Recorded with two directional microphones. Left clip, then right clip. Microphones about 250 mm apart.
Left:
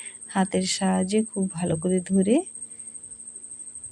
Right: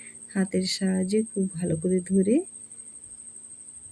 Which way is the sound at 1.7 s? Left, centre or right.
Left.